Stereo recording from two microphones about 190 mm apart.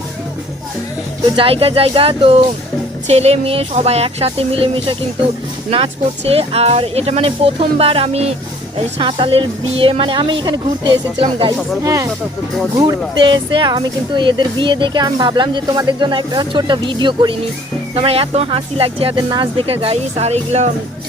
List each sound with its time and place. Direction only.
1.4 s speech: 30° right (ahead or behind)